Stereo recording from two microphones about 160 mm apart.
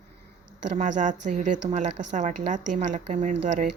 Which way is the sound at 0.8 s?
50° right (ahead or behind).